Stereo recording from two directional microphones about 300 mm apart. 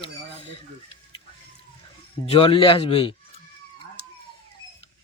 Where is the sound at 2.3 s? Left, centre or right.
Centre.